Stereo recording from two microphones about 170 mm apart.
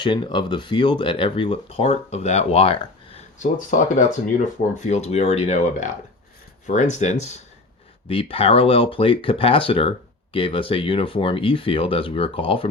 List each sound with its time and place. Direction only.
0.0 s speech: 25° left (ahead or behind)
3.3 s speech: 50° left (ahead or behind); by 12.6 s 30° left (ahead or behind)